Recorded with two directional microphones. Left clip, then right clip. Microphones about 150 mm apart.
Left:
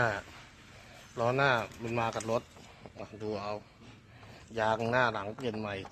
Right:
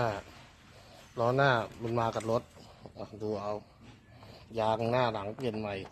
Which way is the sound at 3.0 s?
20° right (ahead or behind).